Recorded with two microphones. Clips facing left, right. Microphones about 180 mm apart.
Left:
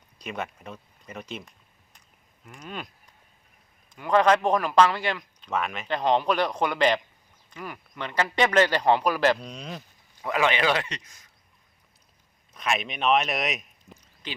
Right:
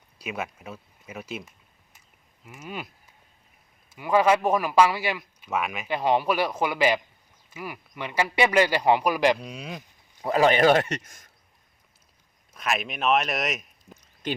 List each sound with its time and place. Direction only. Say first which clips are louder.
0.2 s a man's voice: right 1 dB; 5° right (ahead or behind)
10.2 s a man's voice: right 5 dB; 35° right (ahead or behind)
12.5 s speech: even; centre (ahead or behind)